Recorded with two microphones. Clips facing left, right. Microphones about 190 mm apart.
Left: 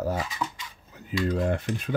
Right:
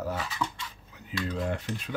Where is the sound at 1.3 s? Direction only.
50° left (ahead or behind).